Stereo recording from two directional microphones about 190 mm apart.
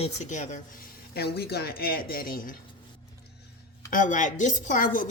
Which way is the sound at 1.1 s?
60° left (ahead or behind).